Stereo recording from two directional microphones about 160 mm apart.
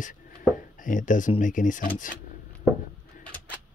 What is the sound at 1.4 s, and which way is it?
Speech, 55° left (ahead or behind).